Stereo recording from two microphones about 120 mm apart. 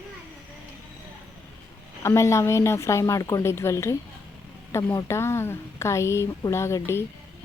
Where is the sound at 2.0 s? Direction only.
25° left (ahead or behind).